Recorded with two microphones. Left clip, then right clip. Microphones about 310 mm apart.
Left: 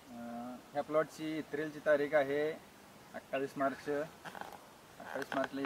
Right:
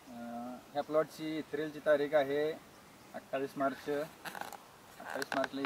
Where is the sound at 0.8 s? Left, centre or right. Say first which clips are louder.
Right 1 dB; centre.